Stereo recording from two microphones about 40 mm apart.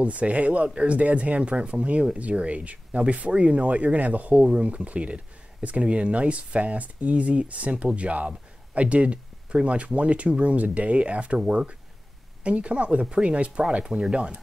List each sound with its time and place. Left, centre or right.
0.0 s speech: right